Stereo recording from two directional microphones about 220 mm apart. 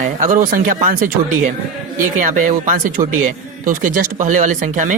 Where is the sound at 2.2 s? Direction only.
35° right (ahead or behind).